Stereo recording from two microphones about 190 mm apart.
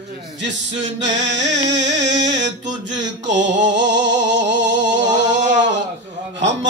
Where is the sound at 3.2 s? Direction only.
70° right (ahead or behind).